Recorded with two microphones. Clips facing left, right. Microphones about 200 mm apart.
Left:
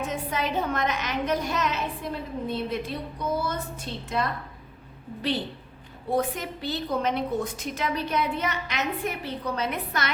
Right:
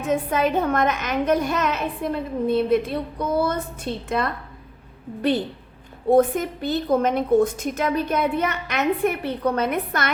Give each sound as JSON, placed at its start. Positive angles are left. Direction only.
{"t": 0.1, "sound": "a woman's voice", "side_deg": -50}
{"t": 6.1, "sound": "a woman's voice", "side_deg": -50}